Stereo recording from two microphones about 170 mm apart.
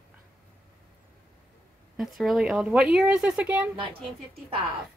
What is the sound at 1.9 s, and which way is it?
Speech, centre (ahead or behind).